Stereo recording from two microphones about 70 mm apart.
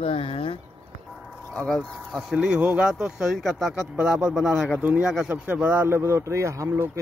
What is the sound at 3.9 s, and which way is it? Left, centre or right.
Speech, centre.